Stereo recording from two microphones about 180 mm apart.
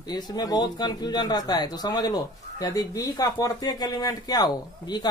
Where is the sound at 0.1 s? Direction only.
20° left (ahead or behind).